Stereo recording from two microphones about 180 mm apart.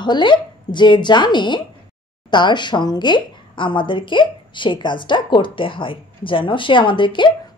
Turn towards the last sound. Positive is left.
turn(degrees=25)  # may be behind; listen again after turning